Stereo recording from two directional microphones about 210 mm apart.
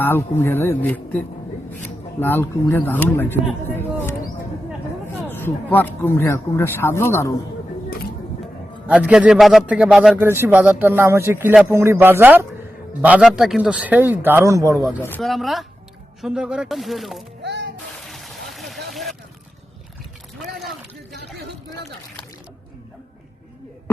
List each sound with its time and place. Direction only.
0.0 s speech: 10° left (ahead or behind)
2.2 s speech: 10° left (ahead or behind)
5.3 s speech: 10° left (ahead or behind)
8.9 s a man's voice: 5° right (ahead or behind)
17.4 s music: 55° right (ahead or behind)
18.0 s vehicle: centre (ahead or behind)